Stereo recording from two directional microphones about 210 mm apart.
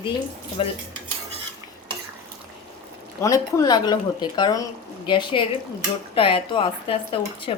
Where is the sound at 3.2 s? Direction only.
15° left (ahead or behind).